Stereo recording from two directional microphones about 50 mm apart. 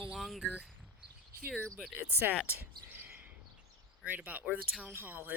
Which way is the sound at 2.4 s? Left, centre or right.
Right.